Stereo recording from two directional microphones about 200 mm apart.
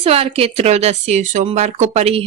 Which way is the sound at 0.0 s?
30° right (ahead or behind).